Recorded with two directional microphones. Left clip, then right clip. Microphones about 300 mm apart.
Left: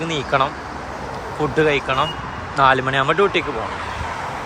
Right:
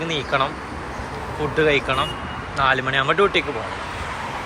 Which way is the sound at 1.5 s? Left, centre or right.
Centre.